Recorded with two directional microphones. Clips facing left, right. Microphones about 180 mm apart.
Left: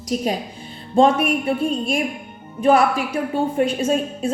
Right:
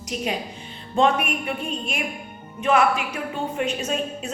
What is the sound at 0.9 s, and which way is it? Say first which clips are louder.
Speech: left 5 dB; 30° left (ahead or behind).